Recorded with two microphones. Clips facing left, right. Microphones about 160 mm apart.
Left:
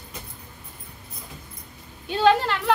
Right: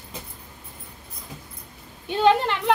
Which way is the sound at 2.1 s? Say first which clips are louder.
Even; 15° right (ahead or behind).